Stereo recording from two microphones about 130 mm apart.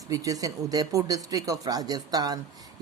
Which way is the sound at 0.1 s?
25° right (ahead or behind).